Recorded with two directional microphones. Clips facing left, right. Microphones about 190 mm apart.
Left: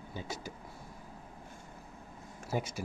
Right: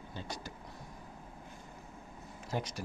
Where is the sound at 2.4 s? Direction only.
10° left (ahead or behind).